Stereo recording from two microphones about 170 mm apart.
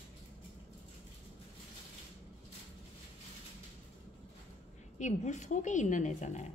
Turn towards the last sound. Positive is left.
turn(degrees=45)  # may be behind; listen again after turning